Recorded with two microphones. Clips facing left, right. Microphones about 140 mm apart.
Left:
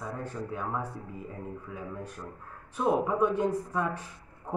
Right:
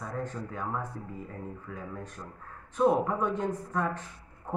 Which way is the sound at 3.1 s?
10° left (ahead or behind).